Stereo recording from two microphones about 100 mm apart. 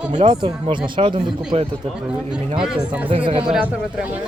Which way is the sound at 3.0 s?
60° right (ahead or behind).